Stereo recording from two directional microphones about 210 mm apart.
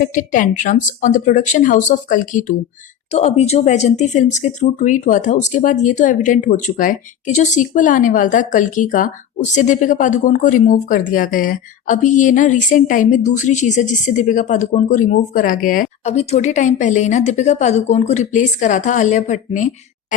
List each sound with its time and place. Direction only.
0.0 s speech: 40° left (ahead or behind)